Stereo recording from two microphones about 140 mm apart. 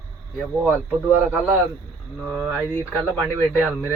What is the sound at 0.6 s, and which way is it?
Speech, 15° right (ahead or behind).